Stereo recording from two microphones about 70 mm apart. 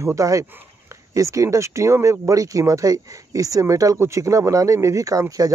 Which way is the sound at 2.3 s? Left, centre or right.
Right.